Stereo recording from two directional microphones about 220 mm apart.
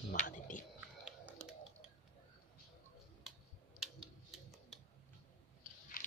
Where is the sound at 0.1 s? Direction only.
35° left (ahead or behind).